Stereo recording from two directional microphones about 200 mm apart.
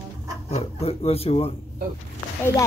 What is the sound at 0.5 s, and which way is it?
Speech, 30° left (ahead or behind).